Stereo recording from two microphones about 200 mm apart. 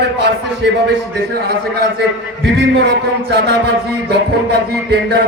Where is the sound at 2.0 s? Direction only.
55° right (ahead or behind).